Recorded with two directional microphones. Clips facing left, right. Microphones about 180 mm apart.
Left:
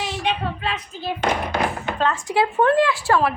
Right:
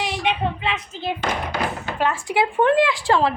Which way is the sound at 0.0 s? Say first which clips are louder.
Right 2 dB; 15° right (ahead or behind).